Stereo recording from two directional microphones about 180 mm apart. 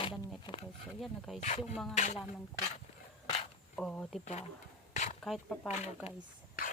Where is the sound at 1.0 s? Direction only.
Centre (ahead or behind).